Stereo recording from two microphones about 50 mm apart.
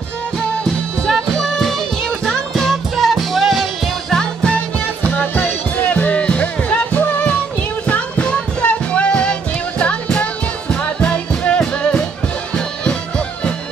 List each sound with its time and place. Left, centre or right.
1.0 s music: centre
4.1 s music: centre
5.1 s music: left; by 11.9 s centre